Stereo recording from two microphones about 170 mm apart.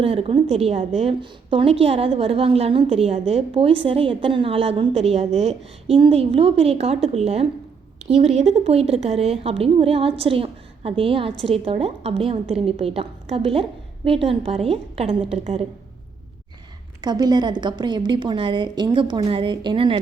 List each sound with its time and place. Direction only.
0.0 s a woman's voice: 35° right (ahead or behind)
17.0 s a woman's voice: 25° right (ahead or behind)